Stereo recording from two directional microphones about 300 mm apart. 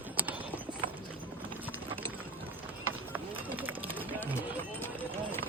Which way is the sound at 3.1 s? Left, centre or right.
Centre.